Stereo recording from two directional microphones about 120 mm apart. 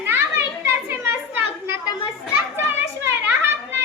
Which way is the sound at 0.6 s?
20° right (ahead or behind).